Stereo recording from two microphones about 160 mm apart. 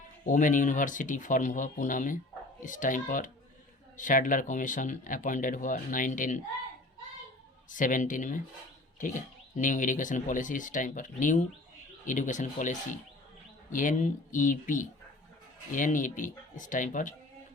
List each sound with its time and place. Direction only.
0.3 s speech: 55° left (ahead or behind)
7.7 s speech: 55° left (ahead or behind)